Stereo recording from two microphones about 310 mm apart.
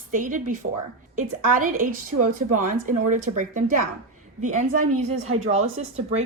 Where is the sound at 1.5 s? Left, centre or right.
Right.